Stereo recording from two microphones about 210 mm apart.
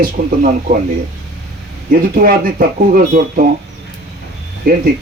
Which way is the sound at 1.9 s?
40° right (ahead or behind).